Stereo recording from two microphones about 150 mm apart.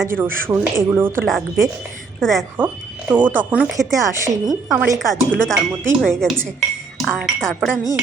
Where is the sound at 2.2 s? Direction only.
Centre (ahead or behind).